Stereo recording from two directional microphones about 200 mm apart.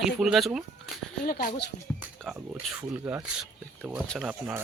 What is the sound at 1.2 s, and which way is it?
Speech, 45° left (ahead or behind).